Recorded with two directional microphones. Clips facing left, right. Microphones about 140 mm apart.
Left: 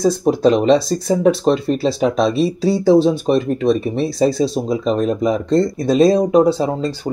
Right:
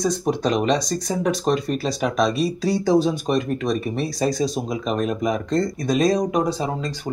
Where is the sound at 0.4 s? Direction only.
30° left (ahead or behind).